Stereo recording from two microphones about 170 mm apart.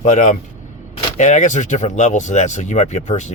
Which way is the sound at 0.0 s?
45° left (ahead or behind).